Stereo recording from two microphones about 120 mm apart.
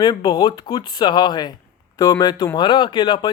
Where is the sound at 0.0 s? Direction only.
40° left (ahead or behind).